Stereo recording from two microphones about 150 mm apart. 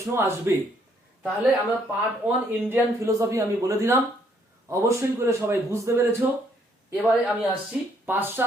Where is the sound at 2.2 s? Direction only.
10° right (ahead or behind).